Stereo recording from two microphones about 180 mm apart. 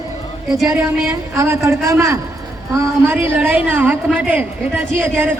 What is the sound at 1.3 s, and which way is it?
Speech, 15° right (ahead or behind).